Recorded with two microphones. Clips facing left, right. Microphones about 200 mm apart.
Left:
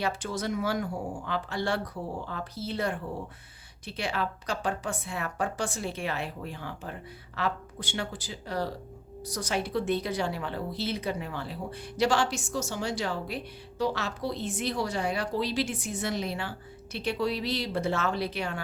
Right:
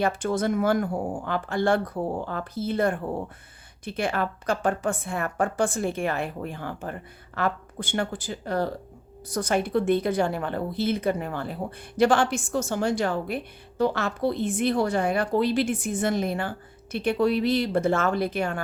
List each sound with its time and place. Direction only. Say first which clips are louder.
0.0 s speech: right 7 dB; 50° right (ahead or behind)